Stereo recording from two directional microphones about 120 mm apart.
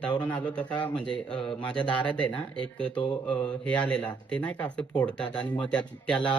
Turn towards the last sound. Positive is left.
turn(degrees=10)  # may be behind; listen again after turning